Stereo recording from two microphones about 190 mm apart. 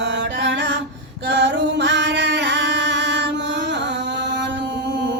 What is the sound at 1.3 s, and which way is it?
Music, 70° right (ahead or behind).